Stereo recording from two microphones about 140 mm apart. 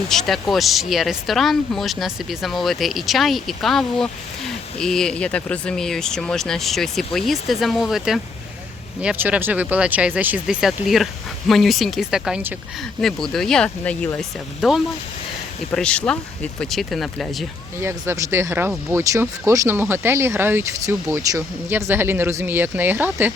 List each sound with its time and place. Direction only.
0.1 s speech: centre (ahead or behind)
17.7 s speech: 20° right (ahead or behind)